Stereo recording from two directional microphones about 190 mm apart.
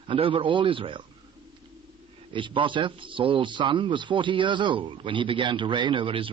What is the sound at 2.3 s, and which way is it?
Speech, 25° right (ahead or behind).